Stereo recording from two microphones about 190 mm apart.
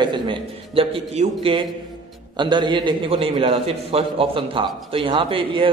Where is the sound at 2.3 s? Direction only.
25° right (ahead or behind).